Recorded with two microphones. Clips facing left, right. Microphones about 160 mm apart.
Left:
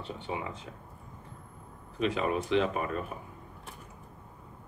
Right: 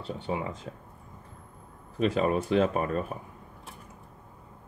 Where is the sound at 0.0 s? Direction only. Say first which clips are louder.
Right 4 dB; 40° right (ahead or behind).